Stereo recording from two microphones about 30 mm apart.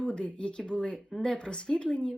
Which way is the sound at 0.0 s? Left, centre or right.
Left.